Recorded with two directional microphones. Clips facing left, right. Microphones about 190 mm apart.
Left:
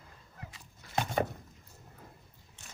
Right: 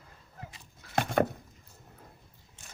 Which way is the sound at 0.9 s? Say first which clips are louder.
Right 4 dB; 55° right (ahead or behind).